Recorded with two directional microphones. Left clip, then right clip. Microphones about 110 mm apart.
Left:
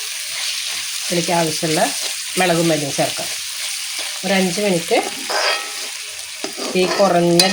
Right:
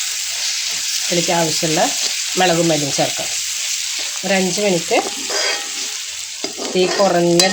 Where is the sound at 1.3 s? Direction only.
10° right (ahead or behind).